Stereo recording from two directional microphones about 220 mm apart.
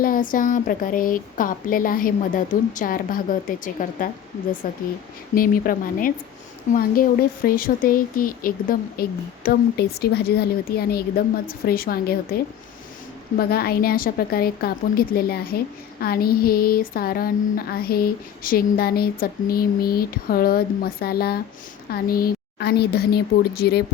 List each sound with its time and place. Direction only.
0.0 s a woman's voice: 40° left (ahead or behind)